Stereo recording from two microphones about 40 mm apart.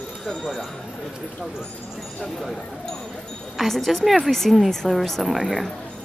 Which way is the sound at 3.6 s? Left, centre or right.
Centre.